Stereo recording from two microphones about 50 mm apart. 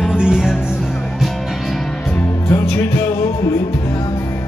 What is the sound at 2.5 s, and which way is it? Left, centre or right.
Music, left.